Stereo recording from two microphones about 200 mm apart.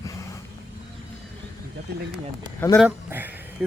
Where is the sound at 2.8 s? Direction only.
10° right (ahead or behind).